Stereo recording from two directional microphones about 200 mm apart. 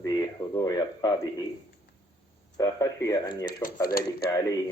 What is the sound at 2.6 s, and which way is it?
Speech, 15° left (ahead or behind).